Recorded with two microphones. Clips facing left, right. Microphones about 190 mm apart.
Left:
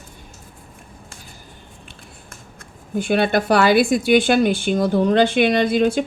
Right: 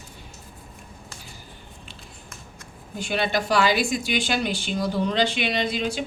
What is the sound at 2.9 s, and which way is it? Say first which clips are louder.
A woman's voice: left 7 dB; 55° left (ahead or behind).